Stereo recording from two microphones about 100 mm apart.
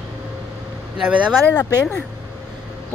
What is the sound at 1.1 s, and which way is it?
Speech, 10° right (ahead or behind).